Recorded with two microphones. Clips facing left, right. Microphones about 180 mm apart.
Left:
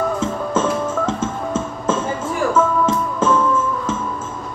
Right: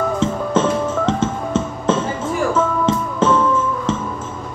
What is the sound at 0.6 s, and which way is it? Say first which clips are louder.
Music: right 2 dB; 30° right (ahead or behind).